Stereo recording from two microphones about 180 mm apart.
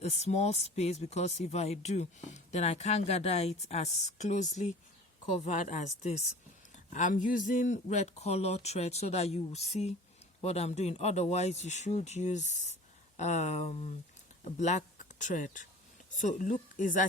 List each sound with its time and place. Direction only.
0.0 s speech: 35° left (ahead or behind)